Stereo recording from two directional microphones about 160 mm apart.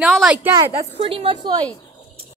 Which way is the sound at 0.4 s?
15° right (ahead or behind).